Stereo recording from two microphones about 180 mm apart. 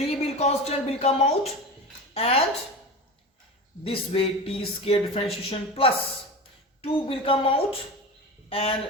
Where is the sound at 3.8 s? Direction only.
30° left (ahead or behind).